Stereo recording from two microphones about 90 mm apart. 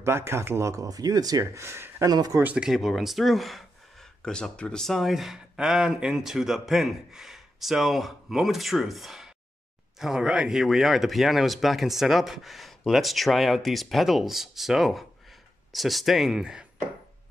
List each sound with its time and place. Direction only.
0.0 s speech: 30° right (ahead or behind)
2.0 s speech: 45° right (ahead or behind)
2.4 s speech: 10° right (ahead or behind)